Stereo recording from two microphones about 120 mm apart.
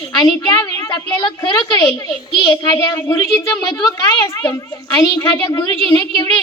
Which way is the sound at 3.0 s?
25° left (ahead or behind).